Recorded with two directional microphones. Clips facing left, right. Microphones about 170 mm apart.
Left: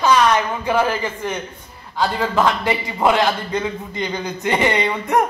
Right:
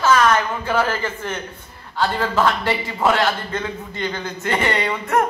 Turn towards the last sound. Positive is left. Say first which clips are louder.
# left 2 dB
turn(degrees=15)  # may be behind; listen again after turning